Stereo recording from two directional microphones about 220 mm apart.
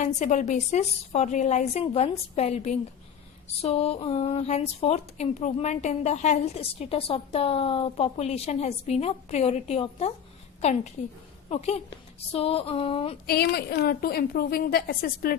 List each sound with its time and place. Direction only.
0.0 s a woman's voice: 35° left (ahead or behind)
13.2 s a woman's voice: 45° left (ahead or behind)